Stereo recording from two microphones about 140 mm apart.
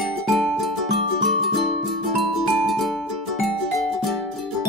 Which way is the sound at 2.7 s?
Centre (ahead or behind).